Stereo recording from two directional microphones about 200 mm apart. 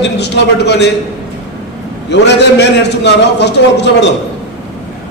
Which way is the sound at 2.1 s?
60° left (ahead or behind).